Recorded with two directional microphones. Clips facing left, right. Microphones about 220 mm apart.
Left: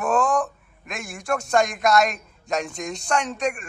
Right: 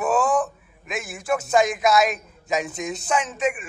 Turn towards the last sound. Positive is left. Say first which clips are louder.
# right 1 dB
turn(degrees=-5)  # may be behind; listen again after turning